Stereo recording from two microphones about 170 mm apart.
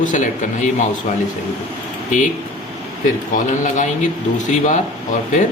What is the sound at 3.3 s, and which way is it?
Speech, 45° left (ahead or behind).